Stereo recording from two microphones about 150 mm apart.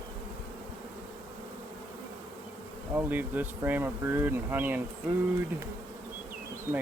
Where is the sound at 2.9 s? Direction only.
10° right (ahead or behind).